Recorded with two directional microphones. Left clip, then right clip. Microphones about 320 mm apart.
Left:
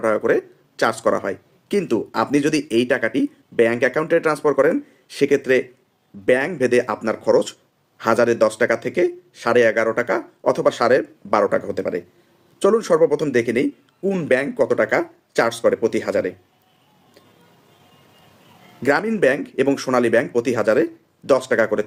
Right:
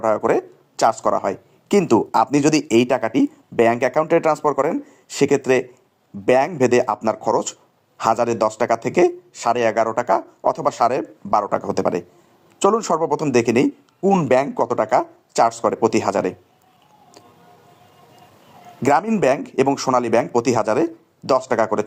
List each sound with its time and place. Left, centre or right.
0.0 s speech: centre
18.8 s speech: centre